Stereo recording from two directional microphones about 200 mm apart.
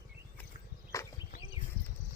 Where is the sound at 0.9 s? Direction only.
15° left (ahead or behind).